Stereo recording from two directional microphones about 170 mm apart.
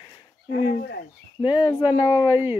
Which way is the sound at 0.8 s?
80° left.